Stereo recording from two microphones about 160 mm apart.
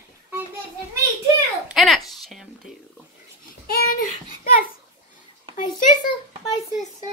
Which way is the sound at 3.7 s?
60° left (ahead or behind).